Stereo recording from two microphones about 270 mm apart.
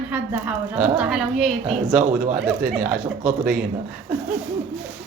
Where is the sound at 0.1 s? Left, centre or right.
Centre.